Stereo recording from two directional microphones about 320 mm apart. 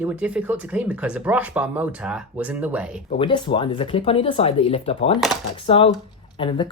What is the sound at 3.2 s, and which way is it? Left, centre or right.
Speech, centre.